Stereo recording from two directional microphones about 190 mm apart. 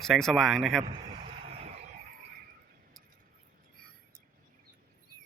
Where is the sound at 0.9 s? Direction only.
30° right (ahead or behind).